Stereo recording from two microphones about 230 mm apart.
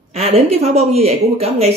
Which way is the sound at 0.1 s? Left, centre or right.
Right.